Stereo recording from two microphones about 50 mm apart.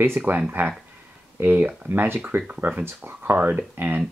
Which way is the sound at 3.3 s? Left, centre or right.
Right.